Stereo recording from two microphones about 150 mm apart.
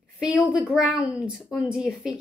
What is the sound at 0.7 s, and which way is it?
A woman's voice, 5° right (ahead or behind).